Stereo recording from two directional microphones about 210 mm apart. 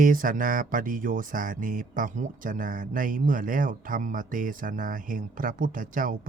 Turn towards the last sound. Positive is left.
turn(degrees=-40)  # may be behind; listen again after turning